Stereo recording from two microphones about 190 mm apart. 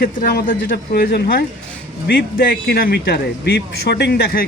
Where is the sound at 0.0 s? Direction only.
50° left (ahead or behind).